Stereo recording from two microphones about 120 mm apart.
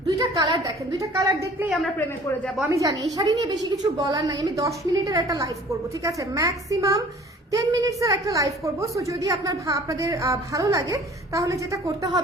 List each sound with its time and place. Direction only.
0.2 s a sound: 35° right (ahead or behind)
1.1 s a woman's voice: 30° right (ahead or behind)
2.6 s a woman's voice: 25° right (ahead or behind)